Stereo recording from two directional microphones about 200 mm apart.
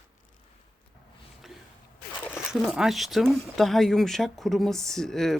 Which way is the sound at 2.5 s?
Centre (ahead or behind).